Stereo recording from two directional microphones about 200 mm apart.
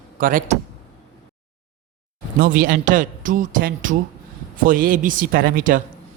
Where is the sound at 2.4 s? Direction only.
45° right (ahead or behind).